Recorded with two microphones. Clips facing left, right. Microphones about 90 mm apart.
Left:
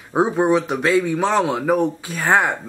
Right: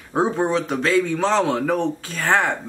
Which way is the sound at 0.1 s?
15° left (ahead or behind).